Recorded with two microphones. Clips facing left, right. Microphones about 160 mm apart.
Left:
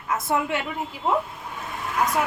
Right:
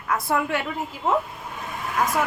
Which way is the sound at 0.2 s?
20° left (ahead or behind).